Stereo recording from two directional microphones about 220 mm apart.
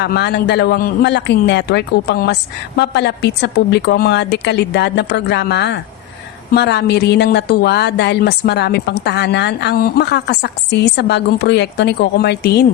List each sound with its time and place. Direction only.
0.0 s speech: 50° left (ahead or behind)